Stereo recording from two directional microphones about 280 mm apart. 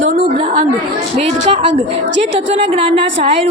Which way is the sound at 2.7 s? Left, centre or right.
Centre.